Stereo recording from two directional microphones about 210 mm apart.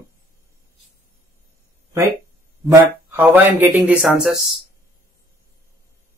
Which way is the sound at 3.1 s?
10° right (ahead or behind).